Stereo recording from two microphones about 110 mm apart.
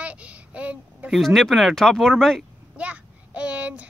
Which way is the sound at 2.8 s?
10° right (ahead or behind).